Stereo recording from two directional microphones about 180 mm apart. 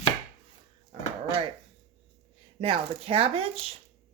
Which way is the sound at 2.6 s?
30° right (ahead or behind).